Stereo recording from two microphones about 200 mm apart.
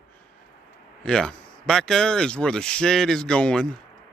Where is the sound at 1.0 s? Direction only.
5° left (ahead or behind).